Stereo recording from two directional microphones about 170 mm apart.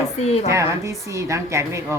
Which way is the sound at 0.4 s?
20° right (ahead or behind).